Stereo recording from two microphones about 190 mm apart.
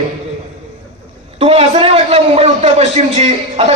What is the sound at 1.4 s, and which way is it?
A man's voice, 30° right (ahead or behind).